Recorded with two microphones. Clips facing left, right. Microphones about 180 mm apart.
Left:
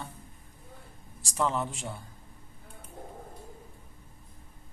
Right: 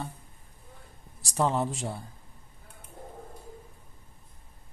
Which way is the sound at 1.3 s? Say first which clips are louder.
Right 3 dB; 35° right (ahead or behind).